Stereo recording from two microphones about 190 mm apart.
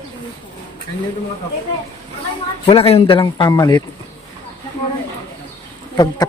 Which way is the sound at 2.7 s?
30° left (ahead or behind).